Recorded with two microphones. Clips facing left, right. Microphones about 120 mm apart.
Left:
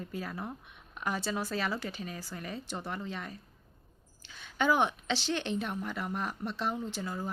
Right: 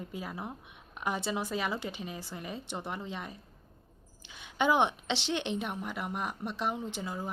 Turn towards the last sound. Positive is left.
turn(degrees=-15)  # may be behind; listen again after turning